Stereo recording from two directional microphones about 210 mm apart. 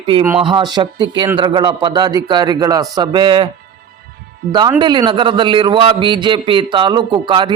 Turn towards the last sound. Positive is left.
turn(degrees=-20)  # may be behind; listen again after turning